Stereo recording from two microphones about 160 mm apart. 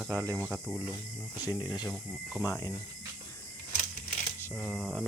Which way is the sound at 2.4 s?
20° left (ahead or behind).